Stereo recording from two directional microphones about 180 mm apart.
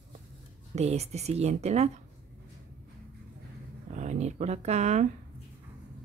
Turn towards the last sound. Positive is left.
turn(degrees=-40)  # may be behind; listen again after turning